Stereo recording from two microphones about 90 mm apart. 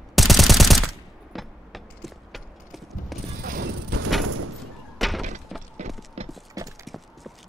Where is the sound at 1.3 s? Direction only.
Centre (ahead or behind).